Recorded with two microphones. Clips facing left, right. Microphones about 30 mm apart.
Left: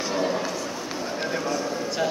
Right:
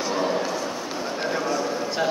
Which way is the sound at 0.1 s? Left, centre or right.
Centre.